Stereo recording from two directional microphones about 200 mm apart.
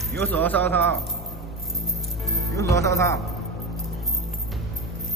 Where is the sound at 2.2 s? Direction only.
Centre (ahead or behind).